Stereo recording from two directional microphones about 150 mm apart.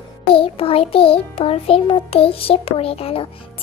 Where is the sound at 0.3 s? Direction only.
40° left (ahead or behind).